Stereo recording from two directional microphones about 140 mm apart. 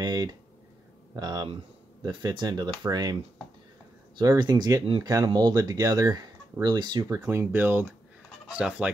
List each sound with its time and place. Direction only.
0.0 s a sound: 30° right (ahead or behind)
1.1 s speech: 30° right (ahead or behind)
4.2 s speech: 30° right (ahead or behind); by 8.9 s 10° right (ahead or behind)